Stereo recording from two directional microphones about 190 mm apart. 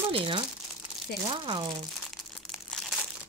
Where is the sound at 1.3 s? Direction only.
25° right (ahead or behind).